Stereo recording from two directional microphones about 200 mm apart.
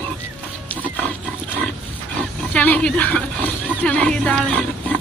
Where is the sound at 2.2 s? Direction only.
5° left (ahead or behind).